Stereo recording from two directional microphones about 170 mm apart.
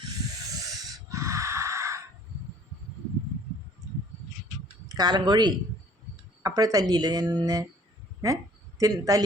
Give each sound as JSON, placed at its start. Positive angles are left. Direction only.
{"t": 0.6, "sound": "a sound", "side_deg": -20}
{"t": 4.9, "sound": "a woman's voice", "side_deg": -25}
{"t": 8.8, "sound": "a woman's voice", "side_deg": -20}